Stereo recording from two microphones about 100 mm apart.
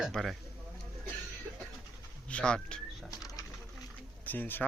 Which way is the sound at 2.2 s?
10° left (ahead or behind).